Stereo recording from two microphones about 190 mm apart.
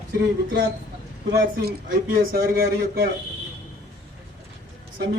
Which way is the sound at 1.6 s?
55° right (ahead or behind).